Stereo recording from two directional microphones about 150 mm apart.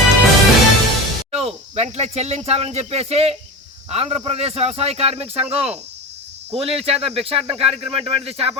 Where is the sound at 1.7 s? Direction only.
45° right (ahead or behind).